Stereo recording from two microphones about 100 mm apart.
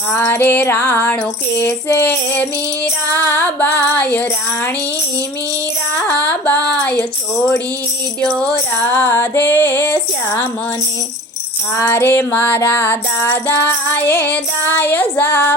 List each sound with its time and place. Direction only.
0.1 s music: 20° left (ahead or behind)
3.2 s female singing: 15° left (ahead or behind)
6.1 s a sound: 15° left (ahead or behind)
8.2 s music: 10° left (ahead or behind)
11.8 s music: 25° left (ahead or behind)